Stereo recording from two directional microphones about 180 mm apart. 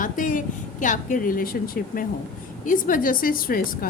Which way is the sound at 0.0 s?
45° left (ahead or behind).